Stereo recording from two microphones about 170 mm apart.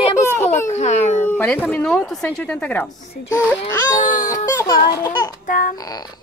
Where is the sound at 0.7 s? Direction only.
45° left (ahead or behind).